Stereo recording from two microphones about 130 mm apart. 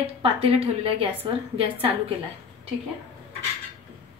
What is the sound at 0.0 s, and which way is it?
A woman's voice, 45° right (ahead or behind).